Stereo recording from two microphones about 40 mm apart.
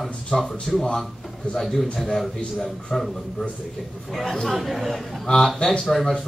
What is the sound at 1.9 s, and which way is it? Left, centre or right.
Speech, centre.